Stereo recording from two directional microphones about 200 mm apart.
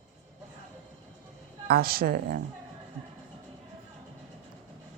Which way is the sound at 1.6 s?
50° right (ahead or behind).